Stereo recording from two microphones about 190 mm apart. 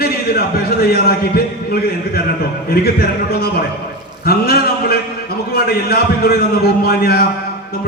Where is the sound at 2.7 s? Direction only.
55° left (ahead or behind).